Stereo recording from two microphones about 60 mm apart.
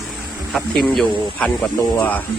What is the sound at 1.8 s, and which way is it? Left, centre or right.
Speech, left.